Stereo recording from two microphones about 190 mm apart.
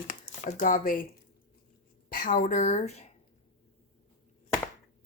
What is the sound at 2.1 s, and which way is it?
Speech, 45° left (ahead or behind).